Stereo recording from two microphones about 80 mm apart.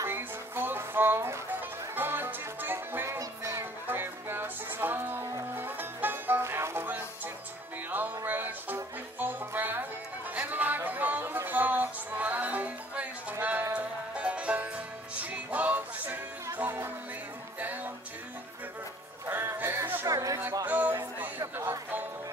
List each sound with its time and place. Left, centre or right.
0.0 s music: right
3.2 s music: right
3.8 s music: right
13.7 s music: centre
19.2 s a sound: right
20.1 s chatter: right
20.6 s a sound: right
21.5 s music: right